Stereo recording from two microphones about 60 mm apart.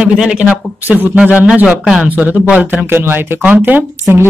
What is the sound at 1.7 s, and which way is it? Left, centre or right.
Speech, centre.